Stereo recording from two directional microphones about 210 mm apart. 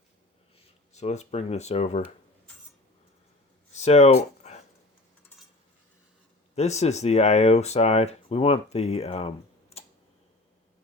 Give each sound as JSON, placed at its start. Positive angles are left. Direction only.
{"t": 0.9, "sound": "speech", "side_deg": 30}
{"t": 3.8, "sound": "a sound", "side_deg": 30}
{"t": 6.6, "sound": "speech", "side_deg": 30}